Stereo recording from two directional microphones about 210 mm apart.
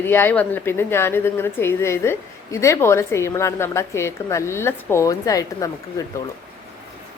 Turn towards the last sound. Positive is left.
turn(degrees=15)  # may be behind; listen again after turning